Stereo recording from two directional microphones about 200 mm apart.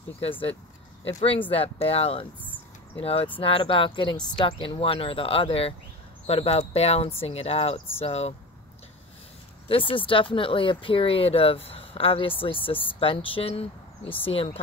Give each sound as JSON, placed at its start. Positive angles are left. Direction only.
{"t": 0.2, "sound": "speech", "side_deg": 30}
{"t": 9.7, "sound": "speech", "side_deg": 25}